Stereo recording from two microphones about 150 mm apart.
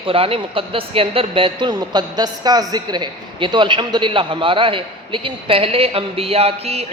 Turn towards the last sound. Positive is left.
turn(degrees=-40)  # may be behind; listen again after turning